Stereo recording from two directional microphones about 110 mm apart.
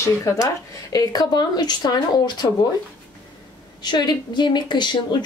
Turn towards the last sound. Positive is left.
turn(degrees=45)  # may be behind; listen again after turning